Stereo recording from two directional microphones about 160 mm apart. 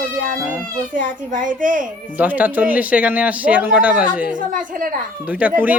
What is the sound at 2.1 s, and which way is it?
Speech, 10° right (ahead or behind).